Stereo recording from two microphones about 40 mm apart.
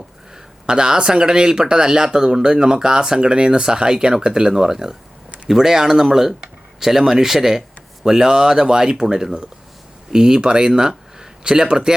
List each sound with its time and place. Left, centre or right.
0.7 s speech: centre